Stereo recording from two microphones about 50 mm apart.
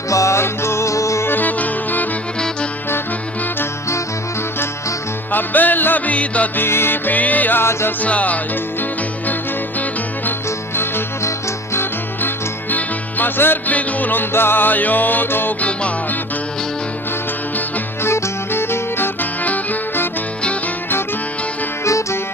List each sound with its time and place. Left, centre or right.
0.1 s music: left
0.4 s music: left
1.3 s music: left
5.3 s music: left
6.1 s music: left
6.6 s music: left
7.6 s music: left
8.0 s music: left
11.7 s music: left
12.7 s music: left
13.7 s music: left
18.0 s music: left
21.8 s music: left